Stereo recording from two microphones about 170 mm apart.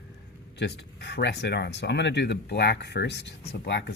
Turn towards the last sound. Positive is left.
turn(degrees=85)